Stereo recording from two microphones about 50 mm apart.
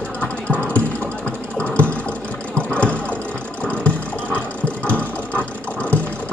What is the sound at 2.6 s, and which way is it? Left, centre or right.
Engine, left.